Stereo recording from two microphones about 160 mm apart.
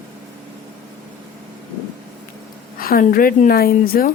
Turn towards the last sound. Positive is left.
turn(degrees=65)  # may be behind; listen again after turning